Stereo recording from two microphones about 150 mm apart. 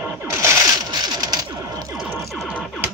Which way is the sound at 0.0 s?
15° right (ahead or behind).